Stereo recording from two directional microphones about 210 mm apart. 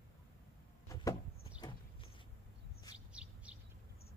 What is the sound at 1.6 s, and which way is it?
Horse, 20° left (ahead or behind).